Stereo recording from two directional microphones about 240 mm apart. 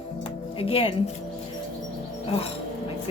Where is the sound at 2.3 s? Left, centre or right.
Left.